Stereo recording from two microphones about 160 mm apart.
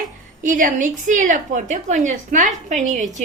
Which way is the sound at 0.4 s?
55° right (ahead or behind).